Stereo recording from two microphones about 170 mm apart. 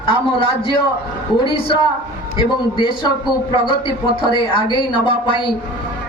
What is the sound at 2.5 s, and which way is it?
Speech, 25° left (ahead or behind).